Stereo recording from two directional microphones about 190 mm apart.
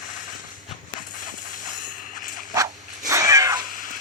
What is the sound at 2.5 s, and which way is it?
Cat, 15° right (ahead or behind).